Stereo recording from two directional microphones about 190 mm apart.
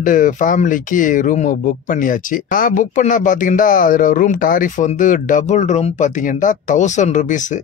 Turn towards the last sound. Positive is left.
turn(degrees=40)  # may be behind; listen again after turning